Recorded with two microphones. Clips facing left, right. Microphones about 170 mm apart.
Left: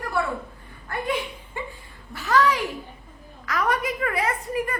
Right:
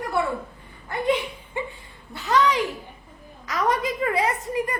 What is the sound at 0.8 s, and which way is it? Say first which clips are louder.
A child's voice: right 4 dB; 20° right (ahead or behind).